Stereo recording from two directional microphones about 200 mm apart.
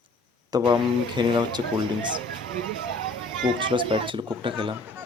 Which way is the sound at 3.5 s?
25° right (ahead or behind).